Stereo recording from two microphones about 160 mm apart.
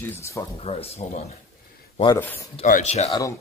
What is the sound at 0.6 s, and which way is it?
Speech, 40° left (ahead or behind).